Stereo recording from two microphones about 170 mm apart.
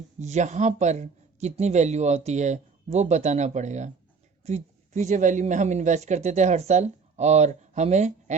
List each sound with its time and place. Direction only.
0.2 s a woman's voice: 40° right (ahead or behind)